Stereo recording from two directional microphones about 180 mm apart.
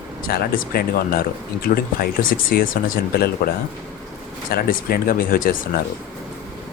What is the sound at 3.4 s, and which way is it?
Speech, 50° left (ahead or behind).